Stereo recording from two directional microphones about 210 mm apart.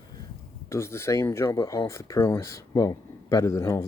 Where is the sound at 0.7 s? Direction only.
10° left (ahead or behind).